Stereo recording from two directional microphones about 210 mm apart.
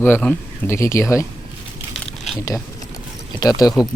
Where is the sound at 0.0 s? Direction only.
5° left (ahead or behind).